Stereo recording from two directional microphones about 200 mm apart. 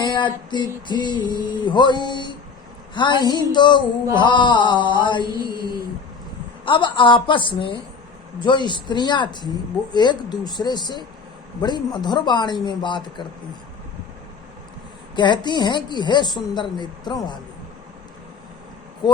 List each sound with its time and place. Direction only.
0.0 s female singing: 20° left (ahead or behind)
2.9 s a sound: 25° left (ahead or behind)
3.2 s female singing: 20° left (ahead or behind)
5.3 s mantra: 20° right (ahead or behind)
6.7 s female singing: 25° left (ahead or behind)
15.1 s female singing: 20° left (ahead or behind)